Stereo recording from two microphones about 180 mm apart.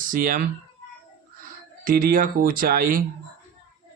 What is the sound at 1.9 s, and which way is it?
Speech, 50° right (ahead or behind).